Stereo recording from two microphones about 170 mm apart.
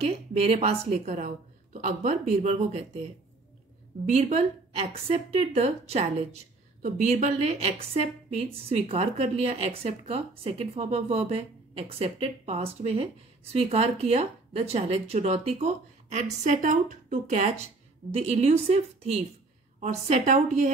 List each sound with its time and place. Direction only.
0.0 s a woman's voice: 35° right (ahead or behind)
4.1 s a woman's voice: 40° right (ahead or behind)